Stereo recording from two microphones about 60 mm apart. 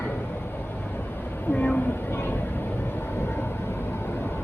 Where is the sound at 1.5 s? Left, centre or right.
Left.